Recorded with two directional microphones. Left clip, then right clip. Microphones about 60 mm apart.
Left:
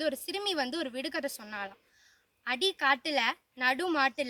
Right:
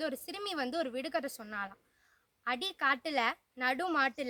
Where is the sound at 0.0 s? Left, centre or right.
Right.